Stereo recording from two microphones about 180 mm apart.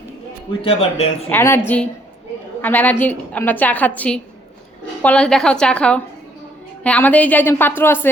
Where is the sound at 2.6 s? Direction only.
10° left (ahead or behind).